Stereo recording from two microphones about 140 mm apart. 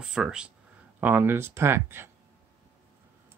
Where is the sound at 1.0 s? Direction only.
15° right (ahead or behind).